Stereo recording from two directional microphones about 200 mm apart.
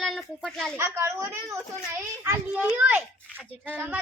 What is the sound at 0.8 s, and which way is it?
Speech, 10° right (ahead or behind).